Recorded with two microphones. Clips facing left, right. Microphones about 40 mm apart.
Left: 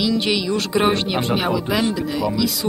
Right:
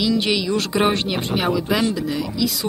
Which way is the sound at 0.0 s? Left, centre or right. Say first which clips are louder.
Even; centre.